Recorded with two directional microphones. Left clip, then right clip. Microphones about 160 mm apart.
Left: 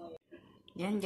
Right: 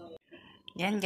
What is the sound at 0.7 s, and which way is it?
Speech, 20° right (ahead or behind).